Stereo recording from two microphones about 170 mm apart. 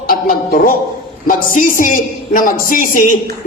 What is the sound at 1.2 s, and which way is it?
A man's voice, 50° left (ahead or behind).